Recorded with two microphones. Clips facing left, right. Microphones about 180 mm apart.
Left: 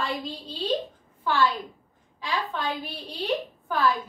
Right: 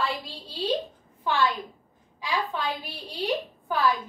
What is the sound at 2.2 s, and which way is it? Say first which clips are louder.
Speech: right 1 dB; 10° right (ahead or behind).